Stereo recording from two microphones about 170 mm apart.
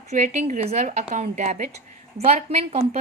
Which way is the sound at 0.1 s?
40° right (ahead or behind).